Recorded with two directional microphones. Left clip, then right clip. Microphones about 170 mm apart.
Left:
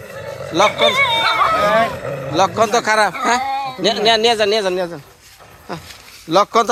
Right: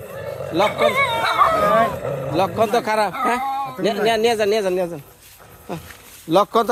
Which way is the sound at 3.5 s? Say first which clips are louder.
Left 3 dB; 70° right (ahead or behind).